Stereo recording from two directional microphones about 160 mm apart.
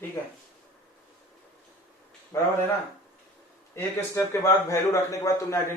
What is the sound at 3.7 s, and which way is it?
A man's voice, 15° left (ahead or behind).